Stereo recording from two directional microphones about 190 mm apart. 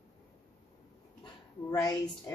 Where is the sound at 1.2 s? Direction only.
20° left (ahead or behind).